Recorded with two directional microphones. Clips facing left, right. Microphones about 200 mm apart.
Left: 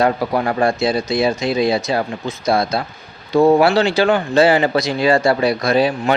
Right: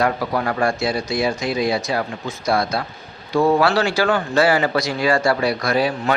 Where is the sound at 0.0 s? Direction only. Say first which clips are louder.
Left 3 dB; 25° left (ahead or behind).